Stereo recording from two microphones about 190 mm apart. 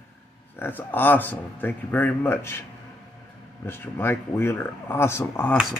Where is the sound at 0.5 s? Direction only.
10° left (ahead or behind).